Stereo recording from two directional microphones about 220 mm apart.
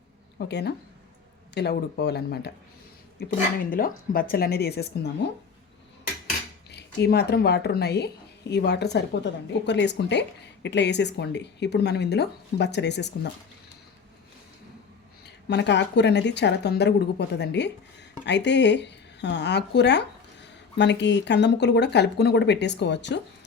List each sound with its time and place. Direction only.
0.3 s speech: 50° left (ahead or behind)
6.7 s speech: 50° left (ahead or behind)
15.4 s speech: 50° left (ahead or behind)